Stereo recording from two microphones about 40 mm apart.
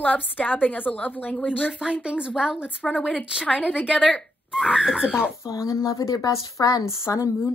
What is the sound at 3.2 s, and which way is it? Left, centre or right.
Speech, centre.